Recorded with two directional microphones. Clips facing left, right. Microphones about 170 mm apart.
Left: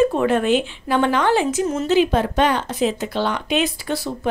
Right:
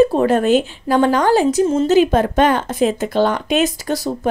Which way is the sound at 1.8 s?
45° right (ahead or behind).